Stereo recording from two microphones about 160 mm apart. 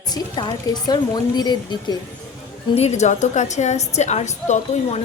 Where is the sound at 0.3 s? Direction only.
25° left (ahead or behind).